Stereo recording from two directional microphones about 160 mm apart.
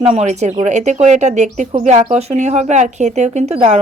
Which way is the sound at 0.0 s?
45° right (ahead or behind).